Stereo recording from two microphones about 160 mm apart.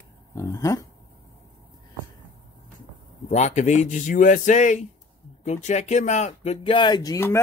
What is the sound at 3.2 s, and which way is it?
Speech, 45° left (ahead or behind).